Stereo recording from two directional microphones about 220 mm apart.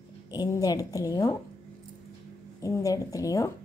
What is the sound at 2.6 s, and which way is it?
Speech, 15° left (ahead or behind).